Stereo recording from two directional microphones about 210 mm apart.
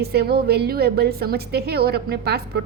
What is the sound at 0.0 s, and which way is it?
A woman's voice, 50° right (ahead or behind).